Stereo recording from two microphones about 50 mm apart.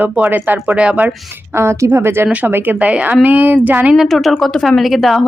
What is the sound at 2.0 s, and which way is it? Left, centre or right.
Speech, right.